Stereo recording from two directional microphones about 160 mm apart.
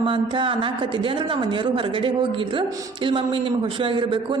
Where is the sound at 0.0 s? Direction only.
30° right (ahead or behind).